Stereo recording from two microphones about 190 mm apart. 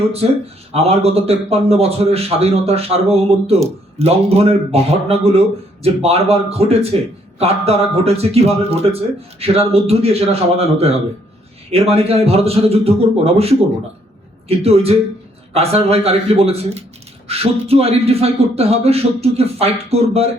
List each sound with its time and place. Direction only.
0.7 s a man's voice: 30° right (ahead or behind)